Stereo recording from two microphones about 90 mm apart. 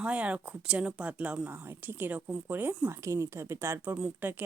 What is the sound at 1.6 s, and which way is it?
Speech, 25° right (ahead or behind).